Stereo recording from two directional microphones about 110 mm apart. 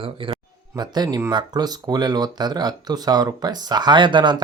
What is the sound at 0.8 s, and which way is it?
Speech, 40° right (ahead or behind).